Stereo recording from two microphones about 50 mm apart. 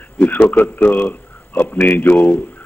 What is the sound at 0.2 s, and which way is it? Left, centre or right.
A man's voice, left.